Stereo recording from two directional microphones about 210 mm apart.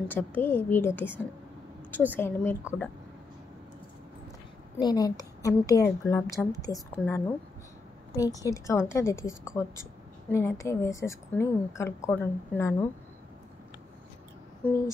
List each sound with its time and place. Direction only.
0.1 s a woman's voice: 10° left (ahead or behind)
4.7 s a woman's voice: 20° left (ahead or behind)
10.3 s a woman's voice: 15° left (ahead or behind)
14.6 s a sound: 10° left (ahead or behind)